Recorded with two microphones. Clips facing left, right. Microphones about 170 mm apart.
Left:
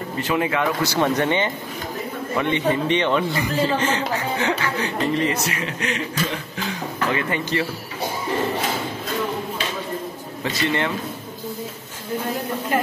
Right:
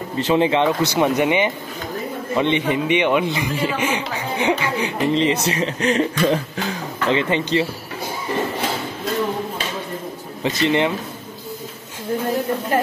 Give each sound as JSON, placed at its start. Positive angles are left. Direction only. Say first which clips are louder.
{"t": 0.2, "sound": "speech", "louder": "right 5 dB", "side_deg": -25}
{"t": 7.1, "sound": "speech", "louder": "right 6 dB", "side_deg": -25}
{"t": 10.4, "sound": "speech", "louder": "right 5 dB", "side_deg": -20}